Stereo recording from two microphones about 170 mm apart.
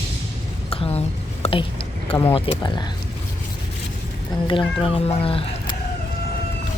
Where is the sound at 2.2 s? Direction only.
35° left (ahead or behind).